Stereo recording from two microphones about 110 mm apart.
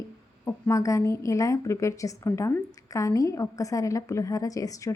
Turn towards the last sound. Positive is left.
turn(degrees=30)  # may be behind; listen again after turning